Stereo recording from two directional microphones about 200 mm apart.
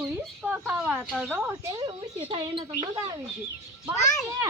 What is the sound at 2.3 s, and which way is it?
Speech, 25° right (ahead or behind).